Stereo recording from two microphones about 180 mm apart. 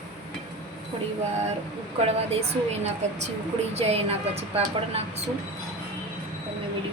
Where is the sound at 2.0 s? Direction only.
35° right (ahead or behind).